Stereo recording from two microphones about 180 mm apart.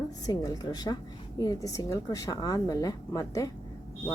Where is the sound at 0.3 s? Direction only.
20° left (ahead or behind).